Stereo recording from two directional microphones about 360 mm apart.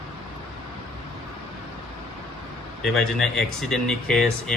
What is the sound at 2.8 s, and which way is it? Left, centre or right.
Speech, centre.